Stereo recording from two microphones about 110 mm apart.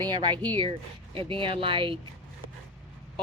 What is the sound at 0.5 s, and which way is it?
A woman's voice, 50° right (ahead or behind).